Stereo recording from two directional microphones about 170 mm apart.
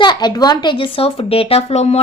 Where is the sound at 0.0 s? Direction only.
25° left (ahead or behind).